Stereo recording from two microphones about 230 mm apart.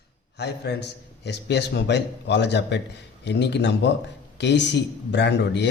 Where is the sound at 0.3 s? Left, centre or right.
Left.